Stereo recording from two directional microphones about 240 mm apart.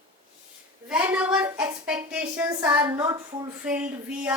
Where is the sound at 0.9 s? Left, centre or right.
Centre.